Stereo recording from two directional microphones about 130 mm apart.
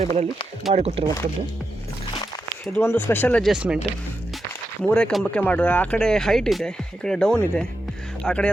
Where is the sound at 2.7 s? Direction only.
15° left (ahead or behind).